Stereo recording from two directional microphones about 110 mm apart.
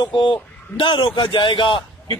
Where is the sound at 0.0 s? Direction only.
50° left (ahead or behind).